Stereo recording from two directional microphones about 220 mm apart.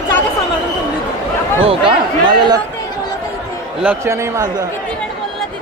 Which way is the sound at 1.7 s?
20° right (ahead or behind).